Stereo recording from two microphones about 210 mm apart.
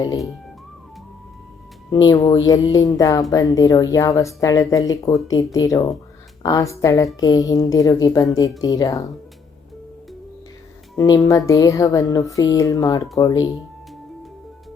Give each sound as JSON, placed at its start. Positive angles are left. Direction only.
{"t": 1.9, "sound": "speech", "side_deg": 20}
{"t": 10.9, "sound": "speech", "side_deg": 15}